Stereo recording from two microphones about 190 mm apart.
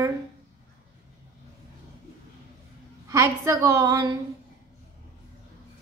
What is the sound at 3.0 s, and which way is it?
A woman's voice, 15° right (ahead or behind).